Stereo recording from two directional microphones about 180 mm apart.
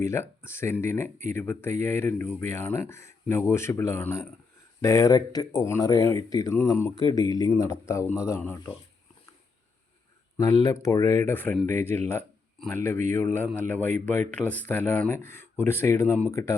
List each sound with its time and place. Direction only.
0.0 s speech: 15° left (ahead or behind)
10.3 s speech: 20° left (ahead or behind)